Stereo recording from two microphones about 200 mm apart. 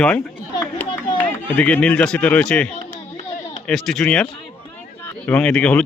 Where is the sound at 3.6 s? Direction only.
Centre (ahead or behind).